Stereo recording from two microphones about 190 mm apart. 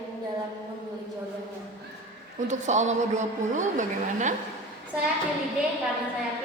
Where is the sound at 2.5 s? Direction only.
40° right (ahead or behind).